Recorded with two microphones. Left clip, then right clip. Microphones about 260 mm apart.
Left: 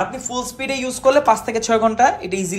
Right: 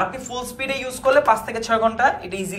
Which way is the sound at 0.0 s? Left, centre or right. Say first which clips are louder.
Left 2 dB; centre.